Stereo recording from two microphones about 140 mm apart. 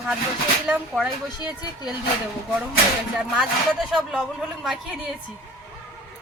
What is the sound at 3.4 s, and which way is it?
A woman's voice, 5° right (ahead or behind).